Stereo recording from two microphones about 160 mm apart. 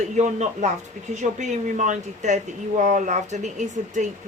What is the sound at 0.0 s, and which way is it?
Speech, 45° right (ahead or behind).